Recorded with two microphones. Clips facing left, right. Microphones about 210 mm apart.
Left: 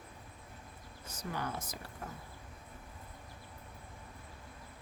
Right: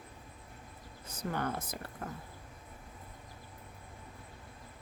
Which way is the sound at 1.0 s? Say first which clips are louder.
Right 4 dB; 55° right (ahead or behind).